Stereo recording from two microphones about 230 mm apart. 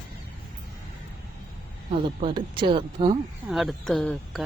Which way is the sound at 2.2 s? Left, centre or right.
Right.